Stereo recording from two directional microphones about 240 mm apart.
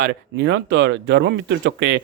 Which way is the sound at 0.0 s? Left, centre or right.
Right.